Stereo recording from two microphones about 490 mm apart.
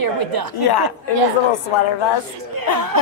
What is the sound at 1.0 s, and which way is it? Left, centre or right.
Speech, left.